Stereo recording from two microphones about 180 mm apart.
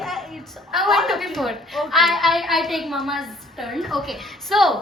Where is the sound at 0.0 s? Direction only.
Centre (ahead or behind).